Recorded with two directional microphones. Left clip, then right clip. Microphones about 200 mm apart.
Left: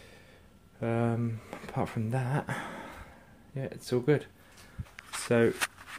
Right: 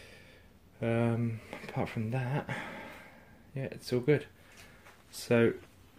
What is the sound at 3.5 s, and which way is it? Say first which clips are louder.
Speech: left 2 dB; 5° left (ahead or behind).